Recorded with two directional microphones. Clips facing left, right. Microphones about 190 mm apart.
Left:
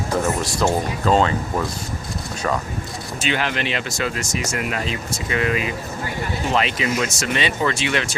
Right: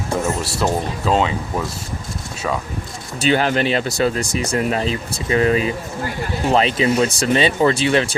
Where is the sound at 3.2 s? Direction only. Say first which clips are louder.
Right 7 dB; 40° right (ahead or behind).